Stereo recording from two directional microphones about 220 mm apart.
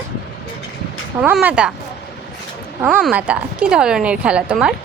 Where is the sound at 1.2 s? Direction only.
5° right (ahead or behind).